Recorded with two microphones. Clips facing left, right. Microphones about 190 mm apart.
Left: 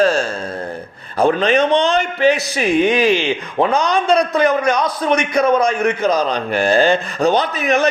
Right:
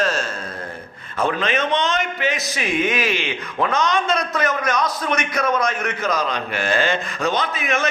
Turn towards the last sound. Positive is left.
turn(degrees=35)  # may be behind; listen again after turning